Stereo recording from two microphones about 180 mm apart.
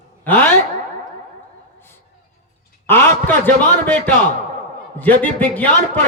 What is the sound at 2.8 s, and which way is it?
Speech, 10° left (ahead or behind).